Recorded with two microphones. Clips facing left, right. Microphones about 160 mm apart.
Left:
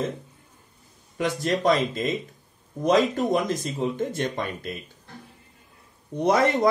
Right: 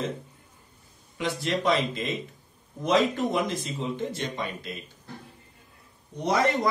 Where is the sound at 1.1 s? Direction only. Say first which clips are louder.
Left 3 dB; 45° left (ahead or behind).